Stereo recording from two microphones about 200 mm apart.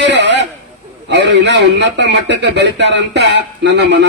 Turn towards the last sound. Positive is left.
turn(degrees=-60)  # may be behind; listen again after turning